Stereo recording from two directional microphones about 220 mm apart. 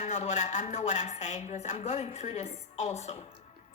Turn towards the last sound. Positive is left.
turn(degrees=30)  # may be behind; listen again after turning